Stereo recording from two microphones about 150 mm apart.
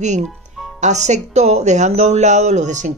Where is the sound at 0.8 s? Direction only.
50° right (ahead or behind).